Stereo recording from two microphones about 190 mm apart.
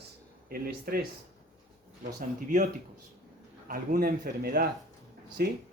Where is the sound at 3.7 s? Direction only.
50° right (ahead or behind).